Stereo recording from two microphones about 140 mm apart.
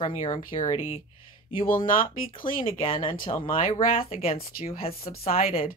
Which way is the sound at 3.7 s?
90° left.